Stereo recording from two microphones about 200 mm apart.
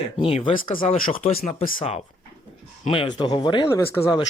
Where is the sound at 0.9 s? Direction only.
30° left (ahead or behind).